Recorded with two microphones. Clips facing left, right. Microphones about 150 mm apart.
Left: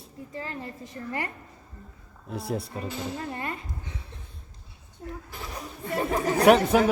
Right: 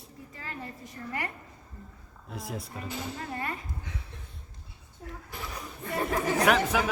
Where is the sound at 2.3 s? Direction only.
30° left (ahead or behind).